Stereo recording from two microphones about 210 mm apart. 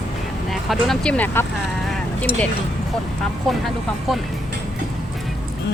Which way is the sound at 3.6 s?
Centre (ahead or behind).